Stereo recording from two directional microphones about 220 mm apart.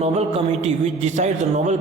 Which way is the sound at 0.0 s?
30° right (ahead or behind).